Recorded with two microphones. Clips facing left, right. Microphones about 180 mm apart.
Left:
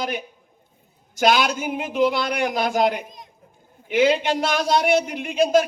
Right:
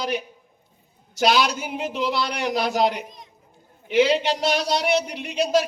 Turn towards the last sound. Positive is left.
turn(degrees=50)  # may be behind; listen again after turning